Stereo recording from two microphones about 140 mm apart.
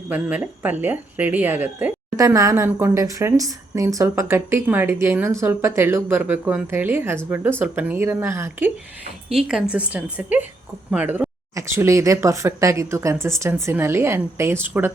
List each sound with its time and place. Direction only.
0.1 s speech: 10° right (ahead or behind)
9.3 s speech: 5° right (ahead or behind)